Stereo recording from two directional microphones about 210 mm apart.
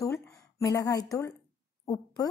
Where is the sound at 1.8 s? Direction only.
20° left (ahead or behind).